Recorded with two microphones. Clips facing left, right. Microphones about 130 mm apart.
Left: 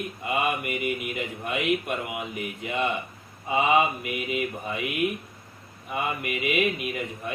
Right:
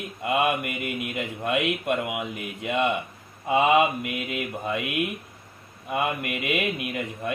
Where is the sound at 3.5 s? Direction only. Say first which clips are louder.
Right 2 dB; 70° right (ahead or behind).